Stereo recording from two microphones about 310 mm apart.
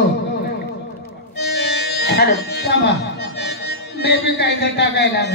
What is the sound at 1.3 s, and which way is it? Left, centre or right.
Speech, left.